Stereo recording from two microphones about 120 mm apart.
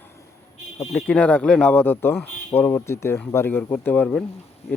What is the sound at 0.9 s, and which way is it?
Speech, 10° left (ahead or behind).